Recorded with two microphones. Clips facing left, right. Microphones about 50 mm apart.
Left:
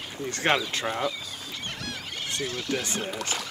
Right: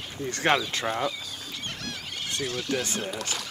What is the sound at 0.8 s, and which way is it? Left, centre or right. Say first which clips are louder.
Speech: even; centre.